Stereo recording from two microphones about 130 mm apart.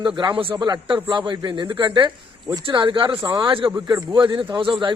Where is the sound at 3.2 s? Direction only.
30° right (ahead or behind).